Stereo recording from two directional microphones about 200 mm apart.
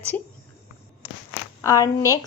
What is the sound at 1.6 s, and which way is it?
Speech, 15° left (ahead or behind).